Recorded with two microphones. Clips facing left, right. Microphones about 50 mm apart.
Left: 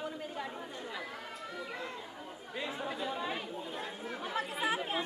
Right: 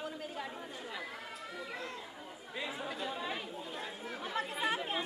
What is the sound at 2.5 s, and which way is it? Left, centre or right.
Chatter, centre.